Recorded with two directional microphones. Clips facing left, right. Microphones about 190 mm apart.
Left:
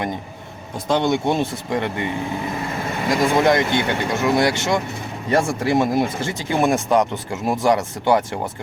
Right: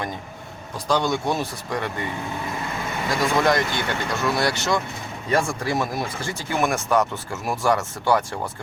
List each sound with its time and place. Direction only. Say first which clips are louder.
0.9 s speech: left 3 dB; 20° left (ahead or behind)
3.1 s speech: left 4 dB; 20° left (ahead or behind)